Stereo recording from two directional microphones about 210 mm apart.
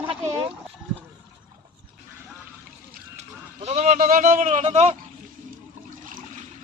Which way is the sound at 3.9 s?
40° right (ahead or behind).